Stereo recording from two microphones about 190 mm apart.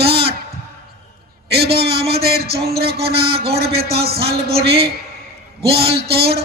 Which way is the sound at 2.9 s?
30° right (ahead or behind).